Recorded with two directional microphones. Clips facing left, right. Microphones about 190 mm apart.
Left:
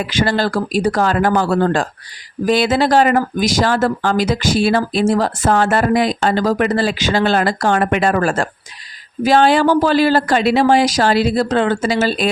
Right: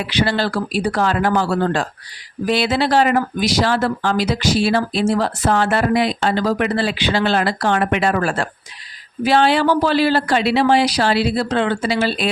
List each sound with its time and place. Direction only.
0.0 s speech: 45° left (ahead or behind)